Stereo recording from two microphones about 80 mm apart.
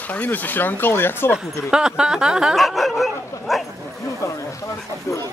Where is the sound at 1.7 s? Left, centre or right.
Centre.